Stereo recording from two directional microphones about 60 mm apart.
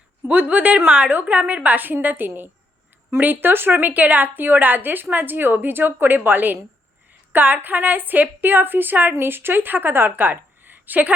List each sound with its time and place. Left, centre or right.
0.3 s a woman's voice: right